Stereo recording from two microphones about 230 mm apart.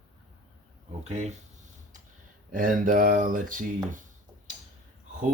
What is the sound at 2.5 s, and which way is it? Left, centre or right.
Speech, right.